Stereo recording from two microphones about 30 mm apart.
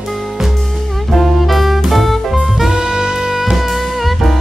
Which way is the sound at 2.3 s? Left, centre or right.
Centre.